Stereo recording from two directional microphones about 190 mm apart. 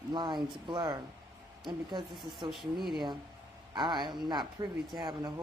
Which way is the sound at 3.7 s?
25° right (ahead or behind).